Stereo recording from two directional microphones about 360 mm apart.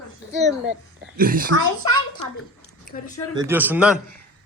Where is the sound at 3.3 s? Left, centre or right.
Centre.